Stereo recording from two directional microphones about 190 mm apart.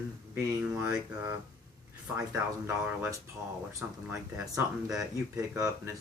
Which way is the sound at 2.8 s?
10° right (ahead or behind).